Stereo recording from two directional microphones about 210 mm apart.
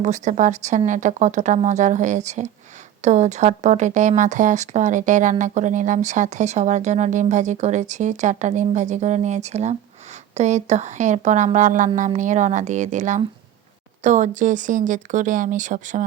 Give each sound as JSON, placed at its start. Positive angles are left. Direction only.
{"t": 0.0, "sound": "speech", "side_deg": -35}